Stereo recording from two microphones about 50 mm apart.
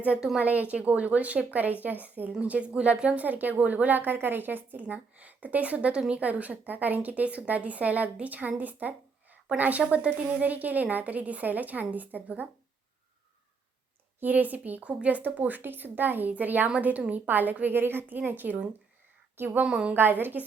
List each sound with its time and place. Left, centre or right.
0.3 s speech: right
2.4 s speech: right
3.2 s speech: right
9.3 s a sound: right
9.8 s speech: right
14.2 s speech: right
19.6 s speech: right
20.0 s a woman's voice: right